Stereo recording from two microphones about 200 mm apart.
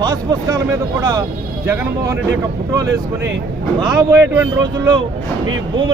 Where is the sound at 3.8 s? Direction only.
15° right (ahead or behind).